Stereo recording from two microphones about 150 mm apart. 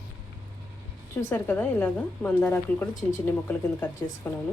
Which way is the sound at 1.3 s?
15° left (ahead or behind).